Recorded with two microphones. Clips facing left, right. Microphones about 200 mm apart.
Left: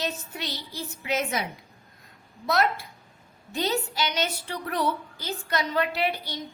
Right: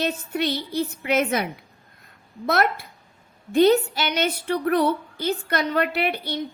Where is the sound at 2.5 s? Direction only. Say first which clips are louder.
Right 3 dB; 60° right (ahead or behind).